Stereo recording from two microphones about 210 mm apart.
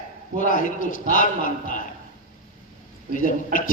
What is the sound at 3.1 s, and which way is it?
Speech, 40° left (ahead or behind).